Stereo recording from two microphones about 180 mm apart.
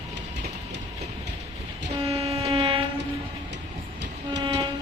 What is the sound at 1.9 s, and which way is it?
Train, 30° right (ahead or behind).